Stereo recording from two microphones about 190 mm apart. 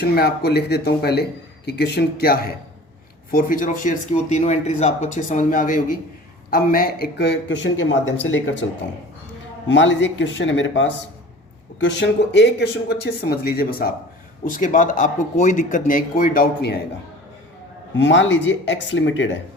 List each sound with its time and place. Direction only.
0.0 s a man's voice: 55° left (ahead or behind)
17.9 s speech: 70° left (ahead or behind)